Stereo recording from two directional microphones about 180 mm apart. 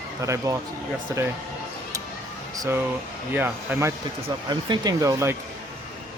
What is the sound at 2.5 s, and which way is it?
Speech, 15° right (ahead or behind).